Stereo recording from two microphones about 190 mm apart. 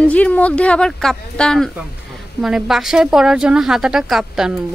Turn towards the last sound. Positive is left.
turn(degrees=0)  # may be behind; listen again after turning